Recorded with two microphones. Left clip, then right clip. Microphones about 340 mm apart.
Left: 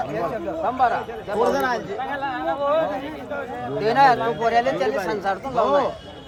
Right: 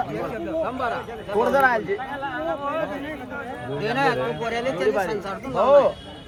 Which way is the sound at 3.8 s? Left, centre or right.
Centre.